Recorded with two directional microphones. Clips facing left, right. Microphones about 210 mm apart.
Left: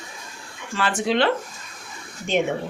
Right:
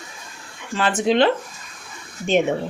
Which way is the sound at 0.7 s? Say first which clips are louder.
Right 4 dB; 20° right (ahead or behind).